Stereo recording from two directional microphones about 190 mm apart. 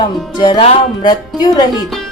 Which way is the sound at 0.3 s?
20° left (ahead or behind).